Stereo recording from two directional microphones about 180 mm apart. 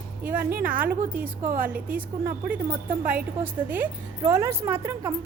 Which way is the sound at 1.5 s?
50° right (ahead or behind).